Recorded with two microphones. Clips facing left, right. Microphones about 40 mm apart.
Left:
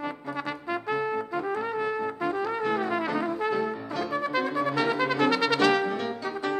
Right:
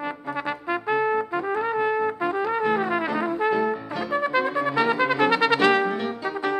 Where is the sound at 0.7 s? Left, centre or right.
Right.